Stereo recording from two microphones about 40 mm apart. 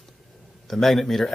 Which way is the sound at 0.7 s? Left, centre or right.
Centre.